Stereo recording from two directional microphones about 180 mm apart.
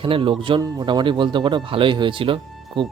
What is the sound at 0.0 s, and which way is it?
Speech, 30° right (ahead or behind).